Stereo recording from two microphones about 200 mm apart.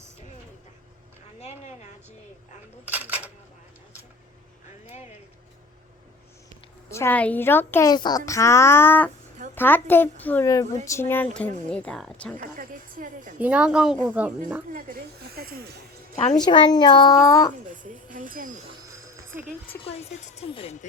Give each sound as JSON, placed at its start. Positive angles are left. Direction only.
{"t": 1.4, "sound": "a sound", "side_deg": 35}
{"t": 2.8, "sound": "speech", "side_deg": -10}
{"t": 4.9, "sound": "speech", "side_deg": 35}
{"t": 6.9, "sound": "speech", "side_deg": 10}
{"t": 12.5, "sound": "speech", "side_deg": -45}
{"t": 13.4, "sound": "speech", "side_deg": -5}
{"t": 14.7, "sound": "speech", "side_deg": -45}
{"t": 16.1, "sound": "speech", "side_deg": 35}
{"t": 16.5, "sound": "speech", "side_deg": 20}
{"t": 17.8, "sound": "speech", "side_deg": -40}
{"t": 19.8, "sound": "speech", "side_deg": 30}